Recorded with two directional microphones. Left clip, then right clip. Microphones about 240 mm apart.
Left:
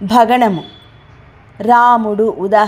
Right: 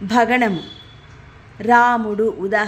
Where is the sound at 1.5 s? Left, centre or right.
Centre.